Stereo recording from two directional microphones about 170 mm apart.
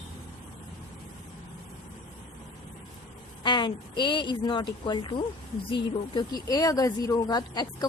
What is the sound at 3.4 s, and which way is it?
Speech, 25° left (ahead or behind).